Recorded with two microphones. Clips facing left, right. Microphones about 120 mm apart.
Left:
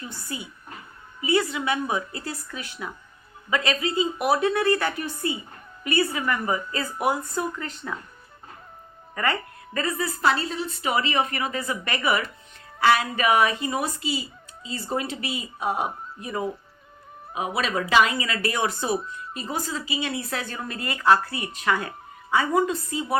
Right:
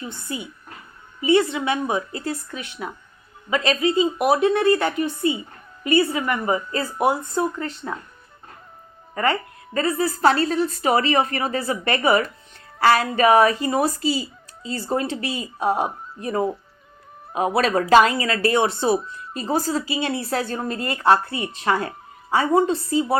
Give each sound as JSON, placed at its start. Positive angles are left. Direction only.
{"t": 0.0, "sound": "a woman's voice", "side_deg": -20}
{"t": 9.1, "sound": "speech", "side_deg": -30}